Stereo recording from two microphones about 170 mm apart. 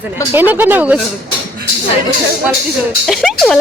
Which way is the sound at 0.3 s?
10° right (ahead or behind).